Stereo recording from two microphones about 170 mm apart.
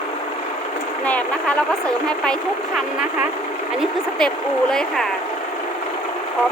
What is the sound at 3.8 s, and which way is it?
Speech, 5° left (ahead or behind).